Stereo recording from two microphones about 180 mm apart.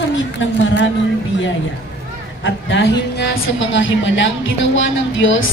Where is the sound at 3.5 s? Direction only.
90° left.